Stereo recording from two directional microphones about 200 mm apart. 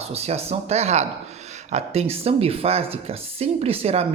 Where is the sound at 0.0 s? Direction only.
30° right (ahead or behind).